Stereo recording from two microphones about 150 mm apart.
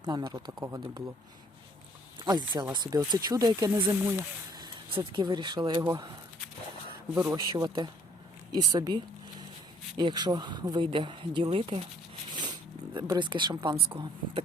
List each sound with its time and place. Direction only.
0.0 s speech: 30° right (ahead or behind)
2.1 s speech: 30° right (ahead or behind)
3.8 s speech: 10° right (ahead or behind)
4.5 s speech: 30° right (ahead or behind)
7.5 s speech: 25° right (ahead or behind)
10.0 s speech: 30° right (ahead or behind)
12.3 s a sound: 30° right (ahead or behind)
13.1 s speech: 30° right (ahead or behind)